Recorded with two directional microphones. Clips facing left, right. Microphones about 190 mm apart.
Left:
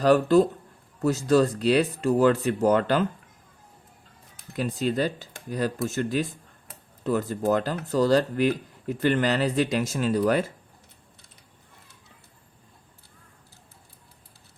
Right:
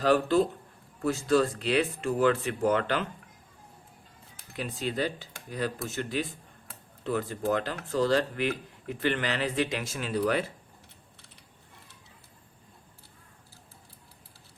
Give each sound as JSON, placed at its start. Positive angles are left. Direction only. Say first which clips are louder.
{"t": 0.0, "sound": "speech", "louder": "left 5 dB", "side_deg": 40}
{"t": 4.5, "sound": "speech", "louder": "left 6 dB", "side_deg": 40}